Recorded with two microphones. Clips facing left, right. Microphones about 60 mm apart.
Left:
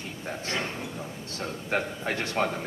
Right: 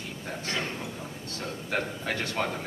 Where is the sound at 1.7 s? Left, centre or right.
Left.